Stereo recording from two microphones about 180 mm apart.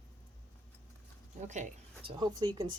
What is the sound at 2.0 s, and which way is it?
Speech, 25° right (ahead or behind).